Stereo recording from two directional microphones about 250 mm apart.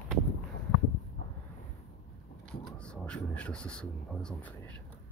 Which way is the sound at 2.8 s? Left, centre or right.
Centre.